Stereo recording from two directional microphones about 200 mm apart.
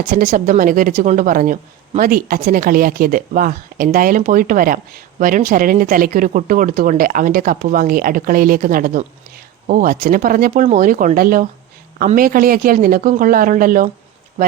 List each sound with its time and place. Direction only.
0.1 s speech: 40° right (ahead or behind)